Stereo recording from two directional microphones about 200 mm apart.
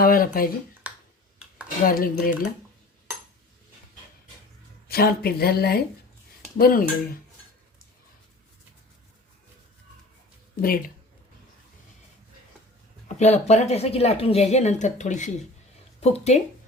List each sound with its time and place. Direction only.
0.0 s speech: 45° left (ahead or behind)
0.9 s finger snapping: 5° right (ahead or behind)
1.6 s speech: 45° left (ahead or behind)
4.9 s speech: 50° left (ahead or behind)
10.6 s speech: 45° left (ahead or behind)
13.1 s a woman's voice: 35° left (ahead or behind)